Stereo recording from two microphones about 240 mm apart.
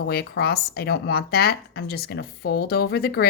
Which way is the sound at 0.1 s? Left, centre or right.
Left.